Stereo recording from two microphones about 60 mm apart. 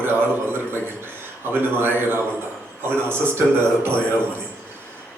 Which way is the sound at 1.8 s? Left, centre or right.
Right.